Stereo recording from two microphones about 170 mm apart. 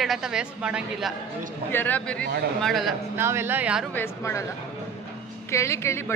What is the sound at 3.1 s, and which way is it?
Speech, 15° right (ahead or behind).